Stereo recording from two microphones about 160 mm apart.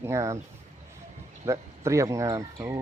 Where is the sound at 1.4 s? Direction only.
20° right (ahead or behind).